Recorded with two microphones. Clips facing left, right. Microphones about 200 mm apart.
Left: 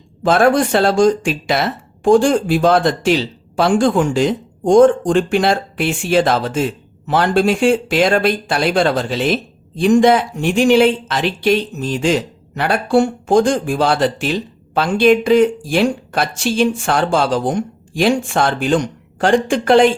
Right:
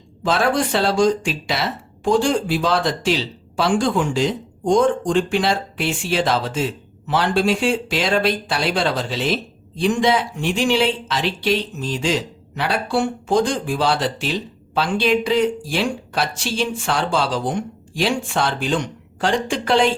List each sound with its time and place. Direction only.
0.2 s speech: 50° left (ahead or behind)